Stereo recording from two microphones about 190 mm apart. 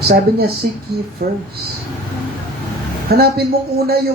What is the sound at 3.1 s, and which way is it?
Speech, 55° right (ahead or behind).